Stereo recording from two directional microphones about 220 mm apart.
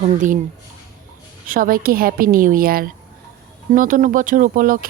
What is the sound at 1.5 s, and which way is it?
A woman's voice, 40° right (ahead or behind).